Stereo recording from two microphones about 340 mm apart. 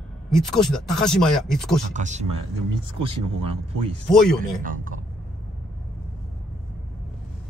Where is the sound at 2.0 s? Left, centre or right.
Right.